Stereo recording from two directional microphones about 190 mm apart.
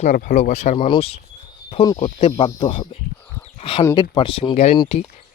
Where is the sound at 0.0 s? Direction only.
40° left (ahead or behind); by 2.0 s 25° left (ahead or behind).